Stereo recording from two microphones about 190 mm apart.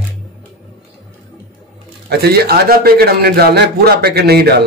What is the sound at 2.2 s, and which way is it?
A man's voice, 55° right (ahead or behind).